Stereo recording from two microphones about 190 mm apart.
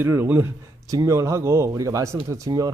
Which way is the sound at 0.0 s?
10° right (ahead or behind).